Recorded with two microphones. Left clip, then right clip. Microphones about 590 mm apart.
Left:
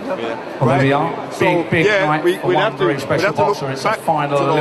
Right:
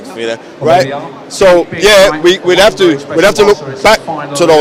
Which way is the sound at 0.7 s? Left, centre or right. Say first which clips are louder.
Right 5 dB; right.